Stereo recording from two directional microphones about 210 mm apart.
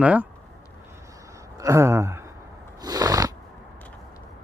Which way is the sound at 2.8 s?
15° right (ahead or behind).